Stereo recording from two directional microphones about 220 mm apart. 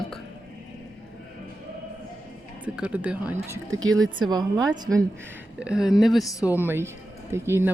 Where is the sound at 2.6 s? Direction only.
5° right (ahead or behind).